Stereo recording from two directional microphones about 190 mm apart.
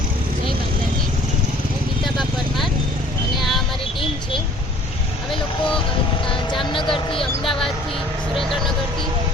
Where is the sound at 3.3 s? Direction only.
Centre (ahead or behind).